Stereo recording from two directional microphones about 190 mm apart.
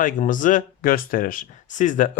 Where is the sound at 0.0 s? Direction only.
45° left (ahead or behind).